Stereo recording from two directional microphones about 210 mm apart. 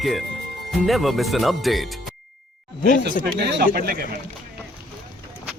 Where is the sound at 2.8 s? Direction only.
40° left (ahead or behind).